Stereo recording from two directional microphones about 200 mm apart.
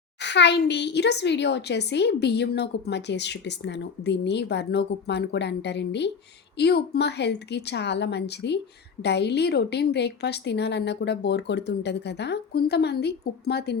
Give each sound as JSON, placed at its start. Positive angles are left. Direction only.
{"t": 0.2, "sound": "a child's voice", "side_deg": 60}